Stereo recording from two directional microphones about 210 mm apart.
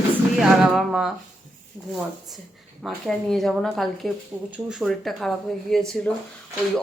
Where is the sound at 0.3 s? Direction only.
Centre (ahead or behind).